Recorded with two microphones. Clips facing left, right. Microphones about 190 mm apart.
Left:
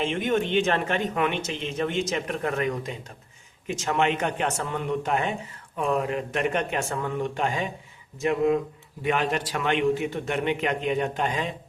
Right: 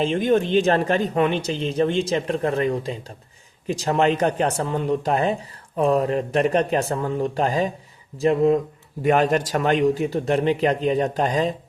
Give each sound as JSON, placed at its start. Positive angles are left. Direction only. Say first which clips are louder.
{"t": 0.0, "sound": "speech", "louder": "right 5 dB", "side_deg": -35}
{"t": 9.0, "sound": "speech", "louder": "right 7 dB", "side_deg": -45}